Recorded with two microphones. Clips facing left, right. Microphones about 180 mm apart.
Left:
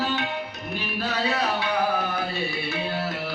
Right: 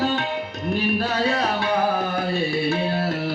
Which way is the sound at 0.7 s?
50° right (ahead or behind).